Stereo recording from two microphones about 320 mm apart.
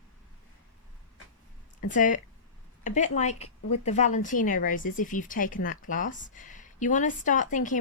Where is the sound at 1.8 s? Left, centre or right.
Left.